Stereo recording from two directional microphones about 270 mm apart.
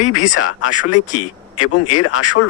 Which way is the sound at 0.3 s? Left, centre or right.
Left.